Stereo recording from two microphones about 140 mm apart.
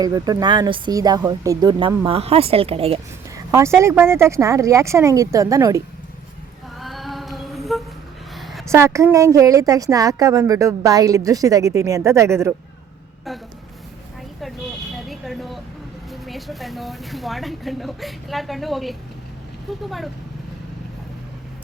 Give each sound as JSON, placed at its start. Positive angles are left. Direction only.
{"t": 0.0, "sound": "a woman's voice", "side_deg": -25}
{"t": 3.3, "sound": "a woman's voice", "side_deg": -20}
{"t": 6.7, "sound": "a sound", "side_deg": 0}
{"t": 8.6, "sound": "a woman's voice", "side_deg": -20}
{"t": 14.9, "sound": "vehicle", "side_deg": 0}
{"t": 16.2, "sound": "speech", "side_deg": 0}